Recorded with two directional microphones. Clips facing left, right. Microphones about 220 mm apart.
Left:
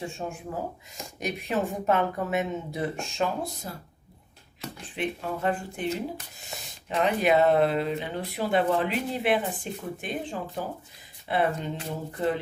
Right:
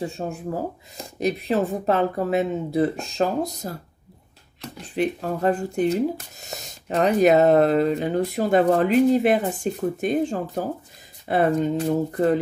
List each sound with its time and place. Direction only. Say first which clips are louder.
0.0 s speech: right 6 dB; 35° right (ahead or behind)
4.9 s speech: right 7 dB; 40° right (ahead or behind)